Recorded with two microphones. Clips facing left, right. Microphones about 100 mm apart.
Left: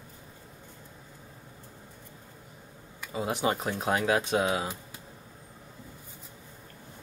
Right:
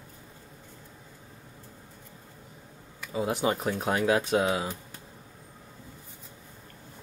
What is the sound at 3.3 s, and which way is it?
Speech, 20° left (ahead or behind).